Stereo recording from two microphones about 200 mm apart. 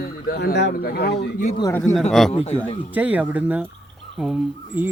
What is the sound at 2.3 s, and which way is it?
Speech, 30° left (ahead or behind).